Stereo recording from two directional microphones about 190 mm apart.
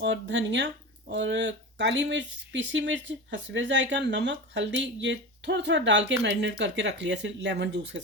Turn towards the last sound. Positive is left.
turn(degrees=-65)  # may be behind; listen again after turning